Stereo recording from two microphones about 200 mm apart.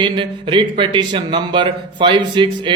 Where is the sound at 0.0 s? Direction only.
25° right (ahead or behind).